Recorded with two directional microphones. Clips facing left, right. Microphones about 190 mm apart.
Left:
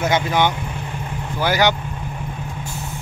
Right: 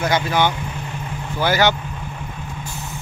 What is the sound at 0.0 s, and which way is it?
Speech, 20° left (ahead or behind).